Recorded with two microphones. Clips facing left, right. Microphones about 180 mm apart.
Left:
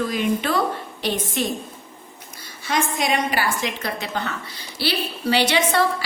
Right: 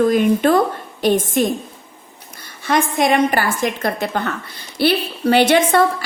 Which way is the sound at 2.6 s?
55° right (ahead or behind).